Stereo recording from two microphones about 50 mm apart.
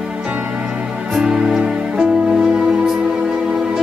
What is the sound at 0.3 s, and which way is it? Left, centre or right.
Music, right.